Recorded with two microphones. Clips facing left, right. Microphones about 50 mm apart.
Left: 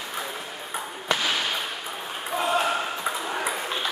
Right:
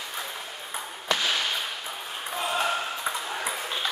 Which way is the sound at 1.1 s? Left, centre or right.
Centre.